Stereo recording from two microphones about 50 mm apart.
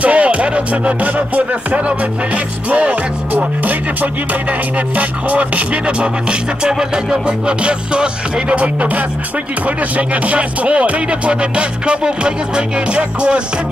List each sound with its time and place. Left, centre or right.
0.0 s music: right
6.6 s music: centre